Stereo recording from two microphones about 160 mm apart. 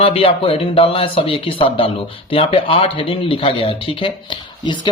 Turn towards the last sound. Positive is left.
turn(degrees=30)  # may be behind; listen again after turning